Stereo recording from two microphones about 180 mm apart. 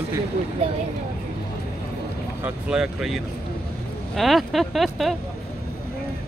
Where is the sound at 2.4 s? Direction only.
5° right (ahead or behind).